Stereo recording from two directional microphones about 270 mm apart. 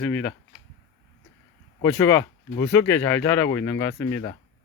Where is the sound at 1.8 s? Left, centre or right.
Centre.